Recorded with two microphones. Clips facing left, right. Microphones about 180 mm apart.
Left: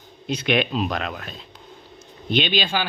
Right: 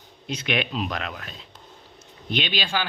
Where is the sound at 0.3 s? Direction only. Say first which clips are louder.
Left 5 dB; 35° left (ahead or behind).